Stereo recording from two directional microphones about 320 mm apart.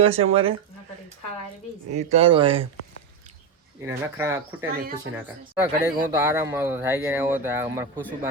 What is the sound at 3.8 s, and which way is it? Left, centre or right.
Speech, centre.